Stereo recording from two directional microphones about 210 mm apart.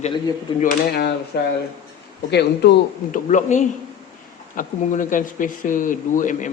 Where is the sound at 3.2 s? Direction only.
35° left (ahead or behind).